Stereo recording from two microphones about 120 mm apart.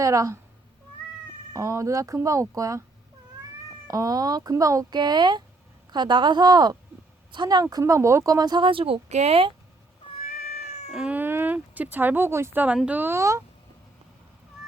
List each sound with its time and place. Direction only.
0.0 s speech: 25° right (ahead or behind)
1.5 s speech: 25° right (ahead or behind)
3.8 s speech: 30° right (ahead or behind); by 9.0 s 50° right (ahead or behind)
9.0 s speech: 65° right (ahead or behind)
10.2 s cat: 65° left (ahead or behind)
10.9 s speech: 10° right (ahead or behind)